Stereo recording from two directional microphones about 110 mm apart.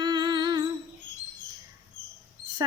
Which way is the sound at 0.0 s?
40° right (ahead or behind).